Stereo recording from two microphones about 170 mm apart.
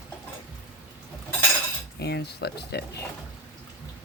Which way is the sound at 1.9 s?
75° left (ahead or behind).